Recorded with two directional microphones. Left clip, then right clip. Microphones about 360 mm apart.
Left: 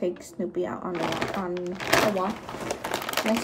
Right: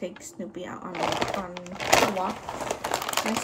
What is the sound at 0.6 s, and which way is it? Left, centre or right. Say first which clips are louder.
Speech: left 7 dB; centre.